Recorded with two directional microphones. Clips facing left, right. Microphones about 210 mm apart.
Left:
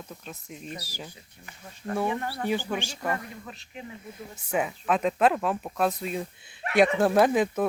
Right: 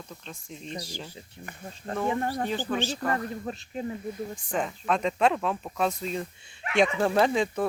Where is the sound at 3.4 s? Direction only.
40° right (ahead or behind).